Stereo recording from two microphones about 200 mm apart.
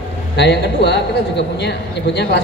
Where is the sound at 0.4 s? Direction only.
55° left (ahead or behind).